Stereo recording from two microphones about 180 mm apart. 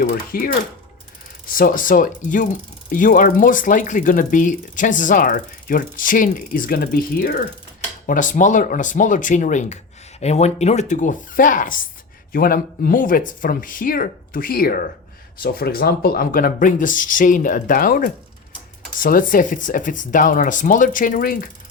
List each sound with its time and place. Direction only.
0.3 s speech: 55° left (ahead or behind)
1.5 s speech: 50° left (ahead or behind)